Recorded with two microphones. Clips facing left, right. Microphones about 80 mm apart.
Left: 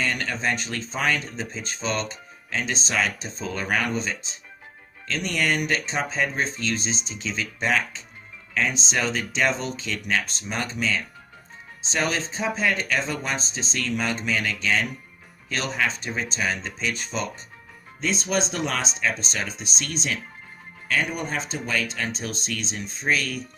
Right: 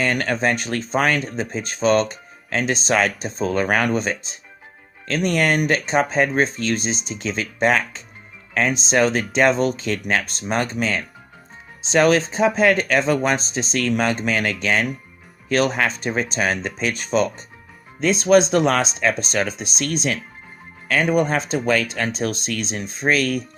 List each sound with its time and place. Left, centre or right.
0.0 s speech: right
11.8 s speech: right